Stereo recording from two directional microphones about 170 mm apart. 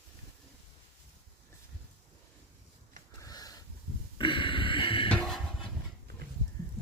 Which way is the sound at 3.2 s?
20° left (ahead or behind).